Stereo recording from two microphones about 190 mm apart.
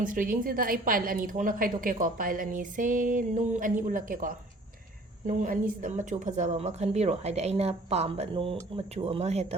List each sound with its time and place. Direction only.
0.0 s a woman's voice: 45° right (ahead or behind)